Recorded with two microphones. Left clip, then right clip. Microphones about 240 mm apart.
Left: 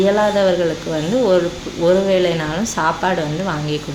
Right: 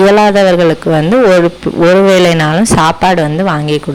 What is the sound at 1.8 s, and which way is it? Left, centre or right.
A woman's voice, right.